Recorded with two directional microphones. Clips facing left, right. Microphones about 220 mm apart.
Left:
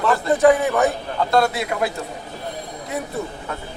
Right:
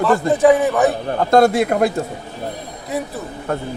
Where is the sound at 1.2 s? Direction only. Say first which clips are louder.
Right 6 dB; 45° right (ahead or behind).